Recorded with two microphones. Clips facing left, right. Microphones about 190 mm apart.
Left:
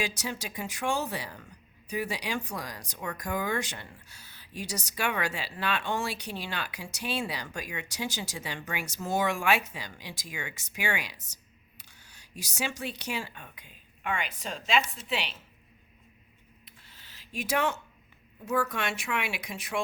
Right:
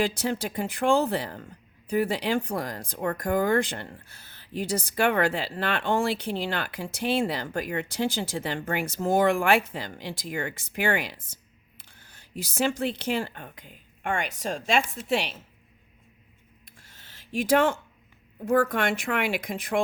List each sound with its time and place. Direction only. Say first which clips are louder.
0.2 s speech: right 8 dB; 55° right (ahead or behind)
11.8 s camera: right 3 dB; 55° right (ahead or behind)
12.4 s speech: right 8 dB; 55° right (ahead or behind)
17.0 s a sound: right 8 dB; 50° right (ahead or behind)
18.4 s speech: right 7 dB; 55° right (ahead or behind)